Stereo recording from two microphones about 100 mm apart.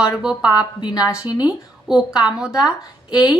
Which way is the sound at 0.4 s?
45° left (ahead or behind).